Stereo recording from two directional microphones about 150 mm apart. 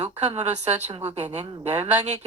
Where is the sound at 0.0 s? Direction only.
45° right (ahead or behind).